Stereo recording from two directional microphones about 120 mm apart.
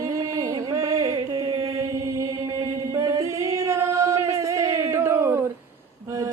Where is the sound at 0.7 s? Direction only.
25° right (ahead or behind).